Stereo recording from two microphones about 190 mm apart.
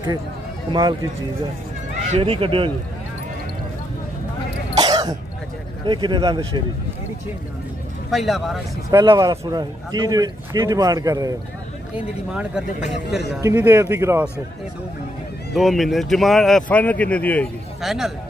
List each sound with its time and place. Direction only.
0.7 s a man's voice: 20° right (ahead or behind)
2.0 s a man's voice: 30° right (ahead or behind)
4.7 s cough: 20° right (ahead or behind)
5.9 s a man's voice: 25° right (ahead or behind)
8.1 s speech: centre (ahead or behind)
8.9 s a man's voice: 25° right (ahead or behind)
13.4 s speech: 15° right (ahead or behind)
15.5 s speech: centre (ahead or behind)